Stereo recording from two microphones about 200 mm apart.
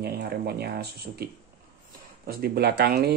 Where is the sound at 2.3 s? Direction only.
50° right (ahead or behind).